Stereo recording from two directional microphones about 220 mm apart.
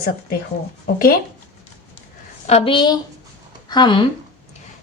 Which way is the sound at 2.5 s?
25° left (ahead or behind).